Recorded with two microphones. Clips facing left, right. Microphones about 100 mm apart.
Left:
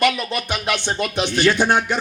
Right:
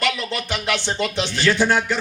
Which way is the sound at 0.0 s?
15° left (ahead or behind).